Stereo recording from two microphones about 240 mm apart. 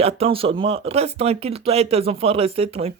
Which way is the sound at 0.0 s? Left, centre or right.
Right.